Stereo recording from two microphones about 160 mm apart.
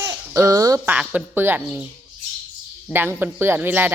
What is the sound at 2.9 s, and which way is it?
Speech, 15° right (ahead or behind).